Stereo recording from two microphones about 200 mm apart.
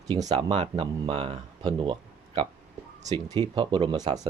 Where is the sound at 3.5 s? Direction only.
25° right (ahead or behind).